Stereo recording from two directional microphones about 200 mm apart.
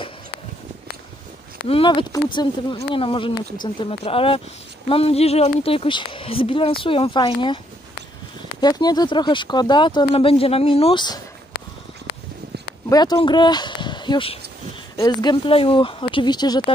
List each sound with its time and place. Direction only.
1.7 s speech: 25° left (ahead or behind)
12.9 s speech: 20° left (ahead or behind)